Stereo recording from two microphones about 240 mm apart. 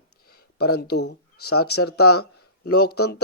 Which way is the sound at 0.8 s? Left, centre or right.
Left.